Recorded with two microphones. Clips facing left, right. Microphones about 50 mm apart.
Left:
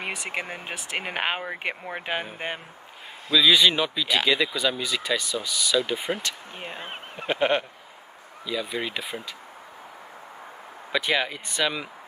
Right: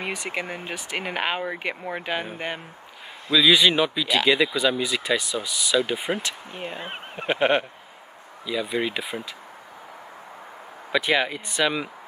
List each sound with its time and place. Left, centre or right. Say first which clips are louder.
0.1 s speech: right 2 dB; centre
3.4 s speech: right 2 dB; centre
7.2 s speech: right 2 dB; centre
10.9 s speech: right 3 dB; centre